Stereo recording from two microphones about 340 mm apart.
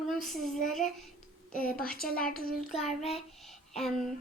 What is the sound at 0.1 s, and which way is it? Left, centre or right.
A woman's voice, centre.